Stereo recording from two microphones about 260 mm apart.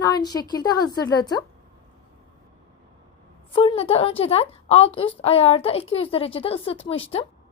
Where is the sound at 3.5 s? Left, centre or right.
Left.